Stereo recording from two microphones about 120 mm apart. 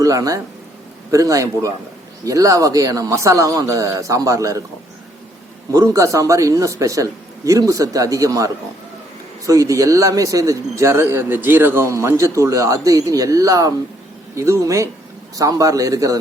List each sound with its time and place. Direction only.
0.0 s a man's voice: 30° right (ahead or behind)
5.7 s a man's voice: 25° right (ahead or behind)